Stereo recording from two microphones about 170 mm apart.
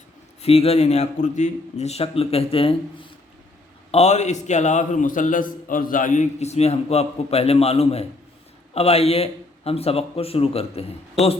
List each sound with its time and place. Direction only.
0.4 s a man's voice: 35° left (ahead or behind)
3.9 s a man's voice: 40° left (ahead or behind)